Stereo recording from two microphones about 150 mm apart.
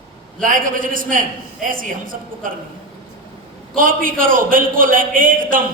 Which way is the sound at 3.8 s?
65° right (ahead or behind).